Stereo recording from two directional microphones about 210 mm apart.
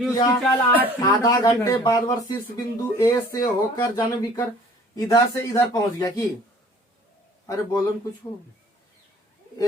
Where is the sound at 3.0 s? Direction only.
15° left (ahead or behind).